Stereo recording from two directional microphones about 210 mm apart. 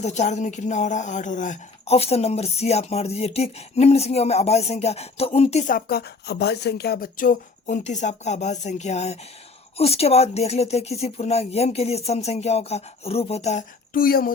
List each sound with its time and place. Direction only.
0.0 s speech: 35° left (ahead or behind)